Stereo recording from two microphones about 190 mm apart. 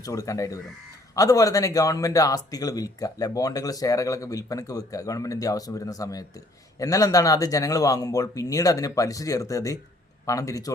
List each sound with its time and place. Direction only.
0.0 s speech: 15° left (ahead or behind)